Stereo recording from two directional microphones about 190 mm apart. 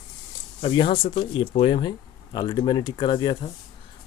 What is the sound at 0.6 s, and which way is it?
Speech, 25° left (ahead or behind).